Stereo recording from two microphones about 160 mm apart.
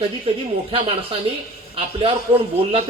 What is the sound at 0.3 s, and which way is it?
Speech, 35° right (ahead or behind).